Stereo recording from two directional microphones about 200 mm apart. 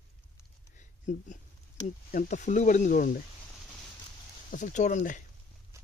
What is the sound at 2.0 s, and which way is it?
Speech, 40° left (ahead or behind).